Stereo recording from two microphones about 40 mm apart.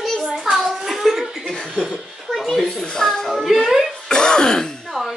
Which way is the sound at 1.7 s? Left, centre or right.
Centre.